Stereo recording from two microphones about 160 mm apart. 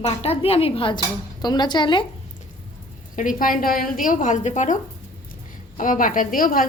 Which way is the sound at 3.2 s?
60° left (ahead or behind).